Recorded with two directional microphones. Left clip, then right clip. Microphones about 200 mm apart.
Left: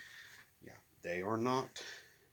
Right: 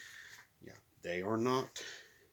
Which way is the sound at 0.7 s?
20° right (ahead or behind).